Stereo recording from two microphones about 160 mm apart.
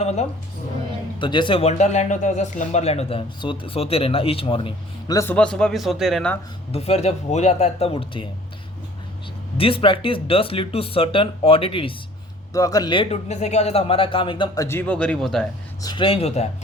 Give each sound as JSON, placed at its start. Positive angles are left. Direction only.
{"t": 0.0, "sound": "speech", "side_deg": 45}
{"t": 1.2, "sound": "speech", "side_deg": 30}
{"t": 5.1, "sound": "a man's voice", "side_deg": 15}
{"t": 6.7, "sound": "speech", "side_deg": 40}
{"t": 9.6, "sound": "speech", "side_deg": 35}
{"t": 12.5, "sound": "speech", "side_deg": 20}
{"t": 13.2, "sound": "speech", "side_deg": 45}
{"t": 15.8, "sound": "speech", "side_deg": 25}